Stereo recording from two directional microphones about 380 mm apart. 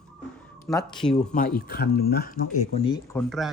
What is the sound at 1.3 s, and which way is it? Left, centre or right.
A man's voice, left.